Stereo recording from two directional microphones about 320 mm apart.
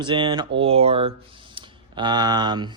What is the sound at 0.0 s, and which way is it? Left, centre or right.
Speech, centre.